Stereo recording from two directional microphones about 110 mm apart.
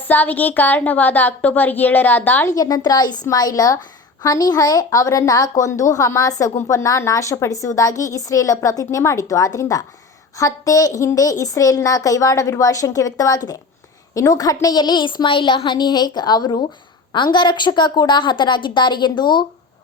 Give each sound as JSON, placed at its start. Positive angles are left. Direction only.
{"t": 0.1, "sound": "speech", "side_deg": 15}
{"t": 2.6, "sound": "a woman's voice", "side_deg": 35}